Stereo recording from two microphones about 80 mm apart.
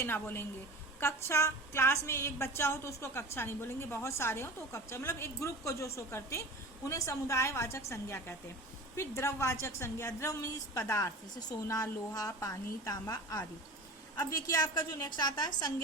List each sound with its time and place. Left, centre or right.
0.0 s a woman's voice: left
11.3 s a woman's voice: left
14.6 s a woman's voice: left